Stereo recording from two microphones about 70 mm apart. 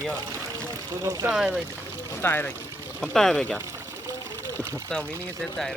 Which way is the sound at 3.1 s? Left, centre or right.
Centre.